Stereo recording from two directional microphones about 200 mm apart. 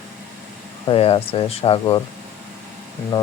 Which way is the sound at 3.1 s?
20° left (ahead or behind).